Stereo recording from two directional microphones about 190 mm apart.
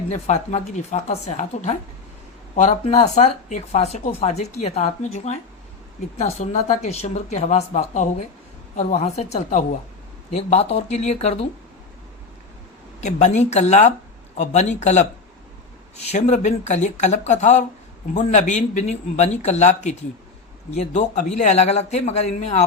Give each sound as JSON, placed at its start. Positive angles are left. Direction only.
{"t": 0.1, "sound": "speech", "side_deg": 40}
{"t": 13.0, "sound": "speech", "side_deg": 40}